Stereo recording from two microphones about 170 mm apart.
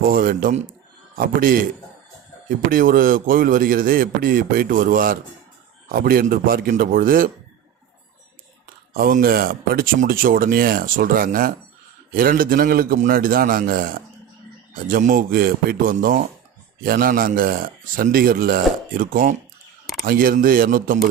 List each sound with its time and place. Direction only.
0.0 s speech: 55° right (ahead or behind)
2.6 s speech: 55° right (ahead or behind)
8.9 s speech: 60° right (ahead or behind)